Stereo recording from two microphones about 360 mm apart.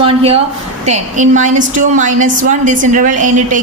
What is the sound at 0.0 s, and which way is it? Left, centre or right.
A woman's voice, centre.